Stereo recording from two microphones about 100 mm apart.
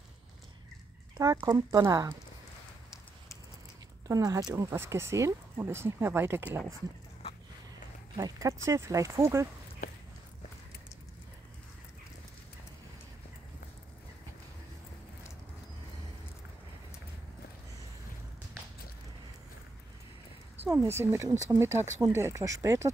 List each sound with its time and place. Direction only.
1.1 s speech: 35° right (ahead or behind)
4.1 s speech: 35° right (ahead or behind)
4.7 s speech: 25° right (ahead or behind)
8.2 s speech: 35° right (ahead or behind)
20.6 s speech: 25° right (ahead or behind)